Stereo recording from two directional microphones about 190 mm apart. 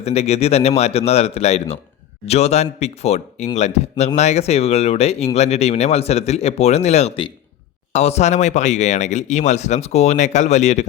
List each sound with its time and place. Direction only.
0.0 s speech: 35° left (ahead or behind)